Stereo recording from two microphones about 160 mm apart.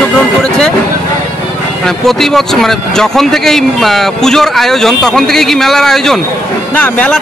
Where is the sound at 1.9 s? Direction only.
5° left (ahead or behind).